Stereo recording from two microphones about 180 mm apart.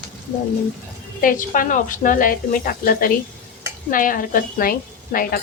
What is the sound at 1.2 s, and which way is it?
A woman's voice, 50° left (ahead or behind).